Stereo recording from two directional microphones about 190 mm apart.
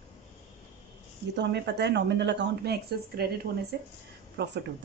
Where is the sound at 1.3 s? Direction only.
65° right (ahead or behind).